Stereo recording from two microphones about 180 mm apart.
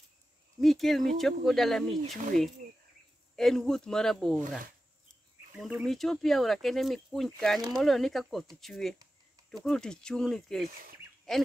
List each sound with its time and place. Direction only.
0.6 s speech: centre (ahead or behind)
2.1 s speech: 50° right (ahead or behind)
3.3 s speech: centre (ahead or behind)
5.6 s speech: centre (ahead or behind)